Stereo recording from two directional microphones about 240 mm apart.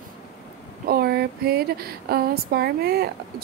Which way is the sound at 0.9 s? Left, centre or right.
Right.